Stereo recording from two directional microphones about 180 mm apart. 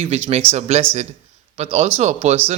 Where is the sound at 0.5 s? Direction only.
40° right (ahead or behind).